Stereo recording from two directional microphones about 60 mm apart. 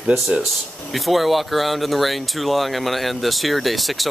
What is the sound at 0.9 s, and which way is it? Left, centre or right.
Speech, centre.